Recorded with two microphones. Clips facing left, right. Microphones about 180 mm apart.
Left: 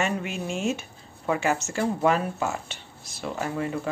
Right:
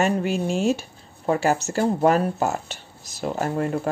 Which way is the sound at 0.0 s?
35° right (ahead or behind).